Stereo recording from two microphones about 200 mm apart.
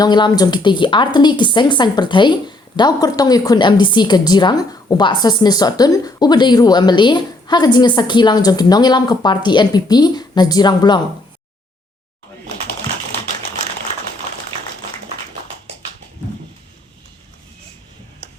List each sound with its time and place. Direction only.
0.0 s speech: 20° left (ahead or behind)